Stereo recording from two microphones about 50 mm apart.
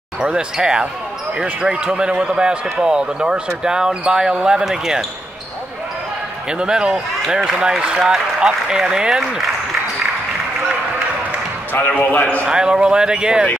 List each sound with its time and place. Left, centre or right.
0.2 s a man's voice: centre
6.6 s a man's voice: centre
11.7 s speech: left
12.4 s a man's voice: centre